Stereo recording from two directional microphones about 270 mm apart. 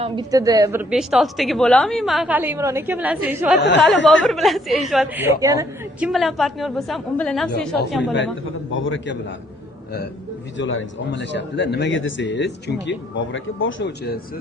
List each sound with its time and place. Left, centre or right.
0.0 s a woman's voice: centre
3.9 s a man's voice: left
4.3 s a woman's voice: centre
6.1 s a woman's voice: centre
8.7 s a man's voice: left
10.6 s speech: left